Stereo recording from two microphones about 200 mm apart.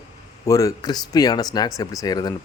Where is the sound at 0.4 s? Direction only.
15° left (ahead or behind).